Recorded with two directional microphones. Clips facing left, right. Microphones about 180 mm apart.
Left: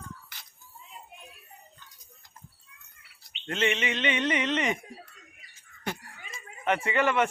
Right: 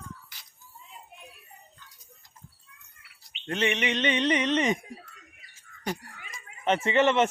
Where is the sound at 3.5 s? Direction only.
15° right (ahead or behind).